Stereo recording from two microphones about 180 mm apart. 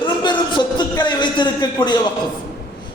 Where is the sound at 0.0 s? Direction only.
25° left (ahead or behind).